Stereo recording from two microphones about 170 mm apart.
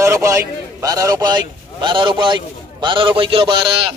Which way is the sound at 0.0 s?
15° right (ahead or behind).